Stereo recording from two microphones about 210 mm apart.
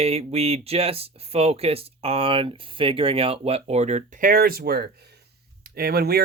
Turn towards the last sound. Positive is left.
turn(degrees=-45)  # may be behind; listen again after turning